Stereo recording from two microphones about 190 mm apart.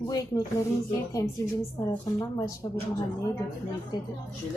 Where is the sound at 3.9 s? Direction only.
20° left (ahead or behind).